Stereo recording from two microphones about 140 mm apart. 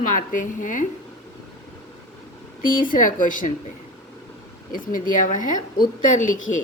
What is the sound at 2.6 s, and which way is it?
Speech, 75° left (ahead or behind).